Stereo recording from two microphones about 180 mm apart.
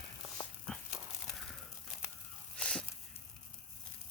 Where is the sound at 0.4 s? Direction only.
20° left (ahead or behind).